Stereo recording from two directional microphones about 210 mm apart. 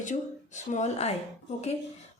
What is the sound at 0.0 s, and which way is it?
A woman's voice, 35° left (ahead or behind).